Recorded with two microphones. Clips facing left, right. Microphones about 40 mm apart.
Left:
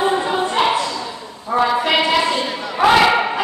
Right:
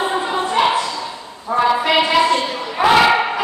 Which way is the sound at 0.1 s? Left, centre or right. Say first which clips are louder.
Even; centre.